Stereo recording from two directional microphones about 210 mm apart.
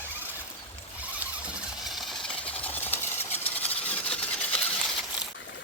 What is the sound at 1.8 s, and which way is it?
Engine, centre (ahead or behind).